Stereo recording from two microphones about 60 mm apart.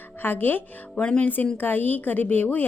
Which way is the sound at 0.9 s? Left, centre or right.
Centre.